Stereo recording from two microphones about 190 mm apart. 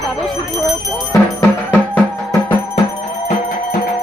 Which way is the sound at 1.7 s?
10° left (ahead or behind).